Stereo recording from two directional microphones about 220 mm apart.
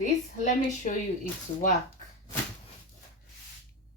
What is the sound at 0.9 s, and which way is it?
Speech, 35° left (ahead or behind).